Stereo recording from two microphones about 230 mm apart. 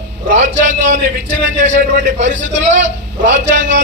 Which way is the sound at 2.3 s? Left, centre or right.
Right.